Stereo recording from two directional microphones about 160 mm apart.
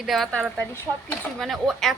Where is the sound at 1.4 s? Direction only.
Centre (ahead or behind).